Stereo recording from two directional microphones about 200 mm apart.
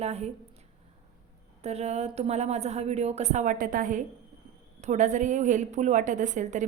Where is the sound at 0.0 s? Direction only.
30° right (ahead or behind).